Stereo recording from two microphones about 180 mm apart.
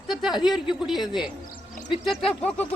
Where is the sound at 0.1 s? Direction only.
Centre (ahead or behind).